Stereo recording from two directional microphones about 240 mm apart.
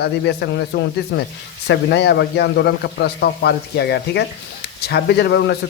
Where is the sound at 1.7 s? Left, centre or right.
Left.